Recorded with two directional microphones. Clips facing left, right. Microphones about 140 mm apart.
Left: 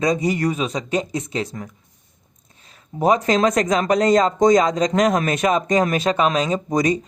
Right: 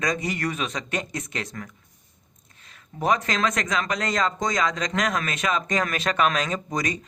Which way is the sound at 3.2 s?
35° left (ahead or behind).